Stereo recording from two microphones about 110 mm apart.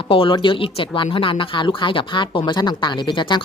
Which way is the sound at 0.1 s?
50° left (ahead or behind).